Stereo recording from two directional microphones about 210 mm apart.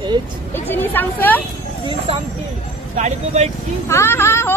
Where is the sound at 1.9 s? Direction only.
25° right (ahead or behind).